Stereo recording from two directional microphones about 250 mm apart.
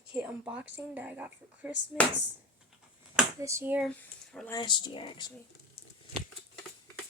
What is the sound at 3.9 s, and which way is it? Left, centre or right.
Speech, centre.